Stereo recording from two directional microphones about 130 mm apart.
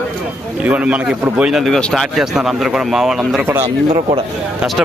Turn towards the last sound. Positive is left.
turn(degrees=-50)  # may be behind; listen again after turning